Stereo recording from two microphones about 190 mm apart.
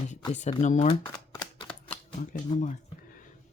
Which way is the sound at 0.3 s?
40° left (ahead or behind).